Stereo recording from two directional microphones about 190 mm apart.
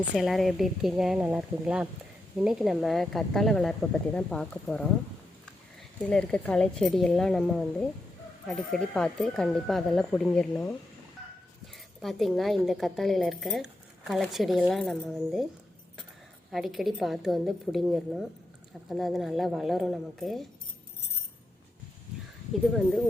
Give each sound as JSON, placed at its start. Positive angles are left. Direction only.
{"t": 0.2, "sound": "speech", "side_deg": 0}
{"t": 6.1, "sound": "speech", "side_deg": 5}
{"t": 12.0, "sound": "speech", "side_deg": 0}
{"t": 16.5, "sound": "speech", "side_deg": 0}